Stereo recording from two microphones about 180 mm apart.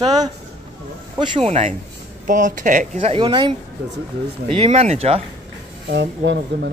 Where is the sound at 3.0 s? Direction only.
30° right (ahead or behind).